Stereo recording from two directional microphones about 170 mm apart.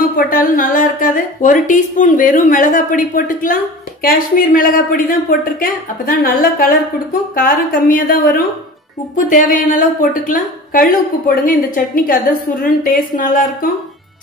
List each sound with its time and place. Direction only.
0.1 s a woman's voice: 55° left (ahead or behind)